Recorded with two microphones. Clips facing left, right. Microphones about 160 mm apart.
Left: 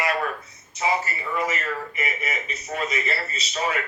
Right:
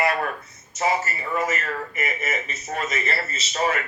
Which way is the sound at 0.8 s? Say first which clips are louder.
Right 1 dB; 45° right (ahead or behind).